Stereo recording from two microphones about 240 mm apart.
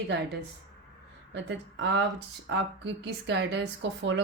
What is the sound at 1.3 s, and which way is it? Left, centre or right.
Speech, right.